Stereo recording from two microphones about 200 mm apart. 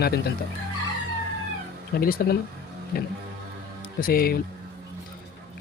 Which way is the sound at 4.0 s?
45° left (ahead or behind).